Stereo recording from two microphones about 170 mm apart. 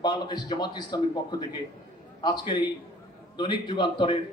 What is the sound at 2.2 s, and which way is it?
Speech, 25° left (ahead or behind).